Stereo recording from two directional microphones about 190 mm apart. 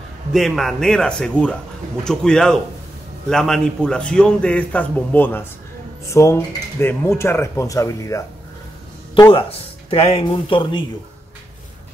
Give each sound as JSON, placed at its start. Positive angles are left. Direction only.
{"t": 0.3, "sound": "a man's voice", "side_deg": 0}
{"t": 9.3, "sound": "speech", "side_deg": 30}